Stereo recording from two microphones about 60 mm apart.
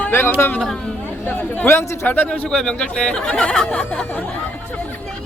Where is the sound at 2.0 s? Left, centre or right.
Left.